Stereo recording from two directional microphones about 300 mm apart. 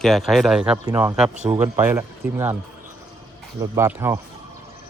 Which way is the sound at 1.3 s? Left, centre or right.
Right.